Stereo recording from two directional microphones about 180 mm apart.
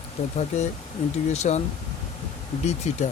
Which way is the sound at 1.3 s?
40° left (ahead or behind).